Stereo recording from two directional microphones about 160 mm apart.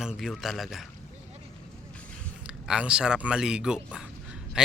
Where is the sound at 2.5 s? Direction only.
5° right (ahead or behind).